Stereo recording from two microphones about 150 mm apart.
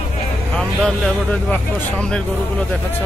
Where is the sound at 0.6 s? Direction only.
5° left (ahead or behind).